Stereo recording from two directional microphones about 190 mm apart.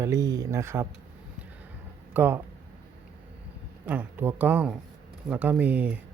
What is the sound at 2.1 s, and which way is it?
Speech, 10° right (ahead or behind).